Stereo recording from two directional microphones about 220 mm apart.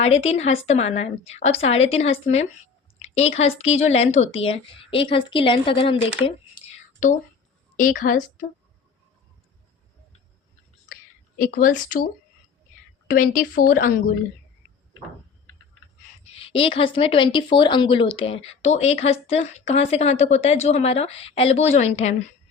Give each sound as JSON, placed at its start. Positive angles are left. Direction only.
{"t": 0.0, "sound": "a woman's voice", "side_deg": 30}
{"t": 11.3, "sound": "a woman's voice", "side_deg": 40}
{"t": 13.1, "sound": "a woman's voice", "side_deg": 35}
{"t": 16.4, "sound": "speech", "side_deg": 25}